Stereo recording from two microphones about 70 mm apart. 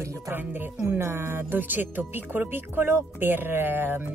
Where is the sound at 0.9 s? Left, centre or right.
Right.